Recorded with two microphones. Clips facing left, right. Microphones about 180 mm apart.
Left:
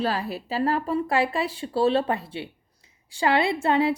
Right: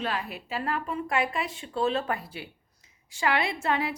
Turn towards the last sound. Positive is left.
turn(degrees=30)  # may be behind; listen again after turning